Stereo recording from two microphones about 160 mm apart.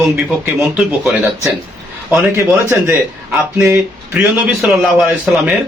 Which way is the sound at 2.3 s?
15° right (ahead or behind).